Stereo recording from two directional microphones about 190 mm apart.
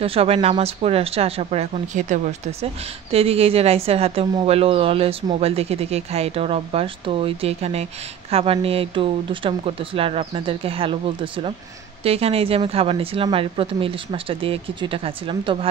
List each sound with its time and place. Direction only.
0.0 s a woman's voice: 30° right (ahead or behind)